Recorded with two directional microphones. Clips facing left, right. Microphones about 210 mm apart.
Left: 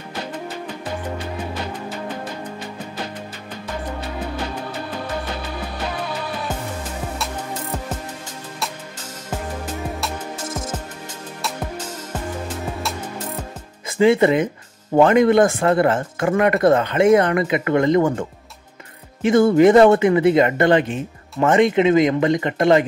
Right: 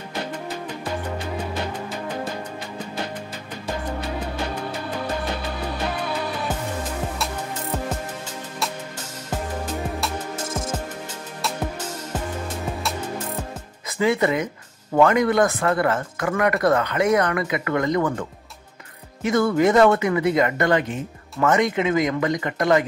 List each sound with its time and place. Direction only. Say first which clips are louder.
13.8 s speech: left 6 dB; 25° left (ahead or behind)
19.2 s speech: left 6 dB; 30° left (ahead or behind)